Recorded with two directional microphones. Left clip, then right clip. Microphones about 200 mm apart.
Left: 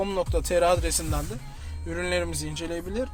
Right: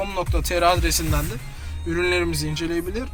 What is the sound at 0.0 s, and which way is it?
Speech, 50° left (ahead or behind).